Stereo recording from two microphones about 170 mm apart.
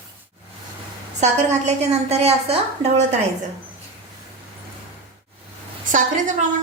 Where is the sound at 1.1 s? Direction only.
40° right (ahead or behind).